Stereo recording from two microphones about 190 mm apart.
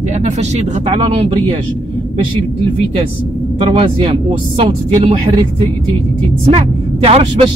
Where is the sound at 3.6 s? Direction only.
30° right (ahead or behind).